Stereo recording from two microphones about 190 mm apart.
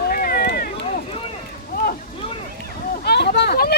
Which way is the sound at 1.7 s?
50° left (ahead or behind).